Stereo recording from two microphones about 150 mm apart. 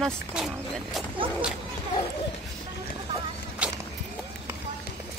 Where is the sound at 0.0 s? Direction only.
5° right (ahead or behind).